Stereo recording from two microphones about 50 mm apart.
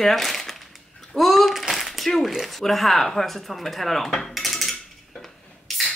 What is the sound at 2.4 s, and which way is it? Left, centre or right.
Speech, centre.